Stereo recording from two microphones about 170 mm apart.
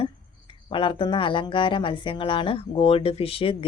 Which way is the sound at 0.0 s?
30° left (ahead or behind).